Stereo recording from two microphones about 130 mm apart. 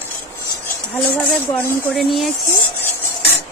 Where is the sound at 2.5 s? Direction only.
20° left (ahead or behind).